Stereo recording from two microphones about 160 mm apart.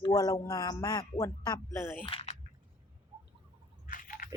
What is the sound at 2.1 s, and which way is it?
Speech, 40° left (ahead or behind).